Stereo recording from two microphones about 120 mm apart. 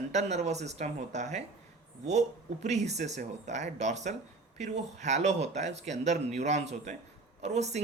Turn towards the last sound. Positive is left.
turn(degrees=-70)  # may be behind; listen again after turning